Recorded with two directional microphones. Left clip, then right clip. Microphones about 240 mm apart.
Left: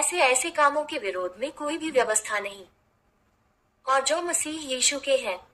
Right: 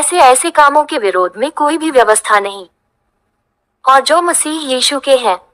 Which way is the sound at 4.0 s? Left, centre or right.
Right.